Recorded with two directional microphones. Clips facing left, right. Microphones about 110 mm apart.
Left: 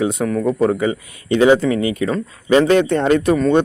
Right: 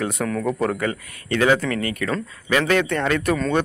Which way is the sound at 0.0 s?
15° left (ahead or behind).